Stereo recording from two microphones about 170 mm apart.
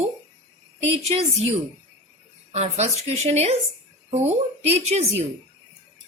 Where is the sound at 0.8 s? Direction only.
35° right (ahead or behind).